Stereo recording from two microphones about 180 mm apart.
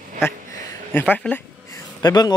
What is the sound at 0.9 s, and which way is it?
Speech, 10° left (ahead or behind).